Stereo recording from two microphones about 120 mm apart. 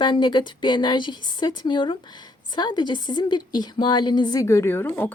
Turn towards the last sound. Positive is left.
turn(degrees=20)  # may be behind; listen again after turning